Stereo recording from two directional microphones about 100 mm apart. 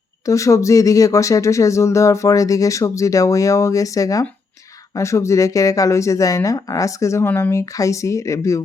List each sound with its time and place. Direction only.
0.3 s speech: 35° left (ahead or behind)